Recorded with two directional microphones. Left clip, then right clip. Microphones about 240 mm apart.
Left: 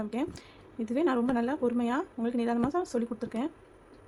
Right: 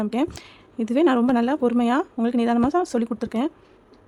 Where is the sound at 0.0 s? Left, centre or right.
Right.